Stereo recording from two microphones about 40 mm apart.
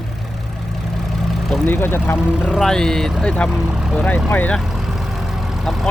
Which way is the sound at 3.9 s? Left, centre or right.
Left.